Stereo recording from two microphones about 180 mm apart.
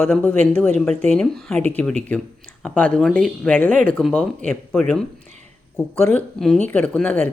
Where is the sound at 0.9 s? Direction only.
40° right (ahead or behind).